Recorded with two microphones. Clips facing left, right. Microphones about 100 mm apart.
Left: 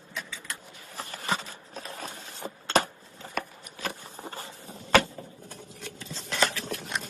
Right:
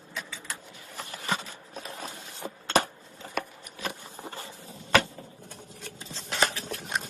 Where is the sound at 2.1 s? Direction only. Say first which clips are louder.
Even; 35° left (ahead or behind).